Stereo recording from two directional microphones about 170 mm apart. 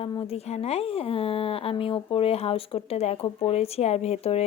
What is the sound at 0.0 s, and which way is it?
Speech, 35° left (ahead or behind).